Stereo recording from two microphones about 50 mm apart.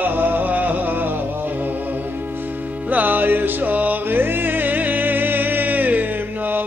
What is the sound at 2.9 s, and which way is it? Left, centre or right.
Music, right.